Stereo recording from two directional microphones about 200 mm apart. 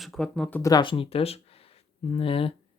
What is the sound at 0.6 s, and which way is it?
Speech, 20° left (ahead or behind).